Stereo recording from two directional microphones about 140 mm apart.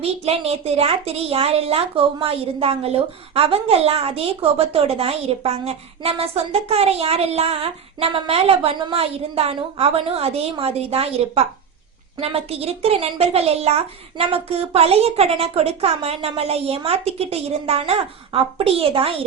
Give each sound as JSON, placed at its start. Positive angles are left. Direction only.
{"t": 0.0, "sound": "a woman's voice", "side_deg": -45}